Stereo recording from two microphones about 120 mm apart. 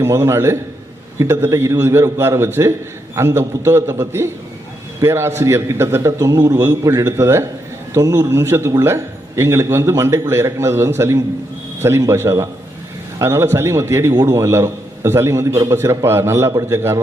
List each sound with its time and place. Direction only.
0.0 s a man's voice: 25° right (ahead or behind)